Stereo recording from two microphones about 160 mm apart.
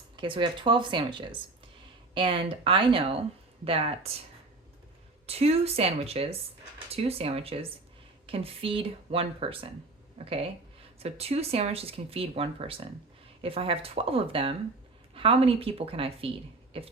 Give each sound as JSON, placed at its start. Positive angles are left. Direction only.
{"t": 0.2, "sound": "speech", "side_deg": -30}
{"t": 5.2, "sound": "speech", "side_deg": -40}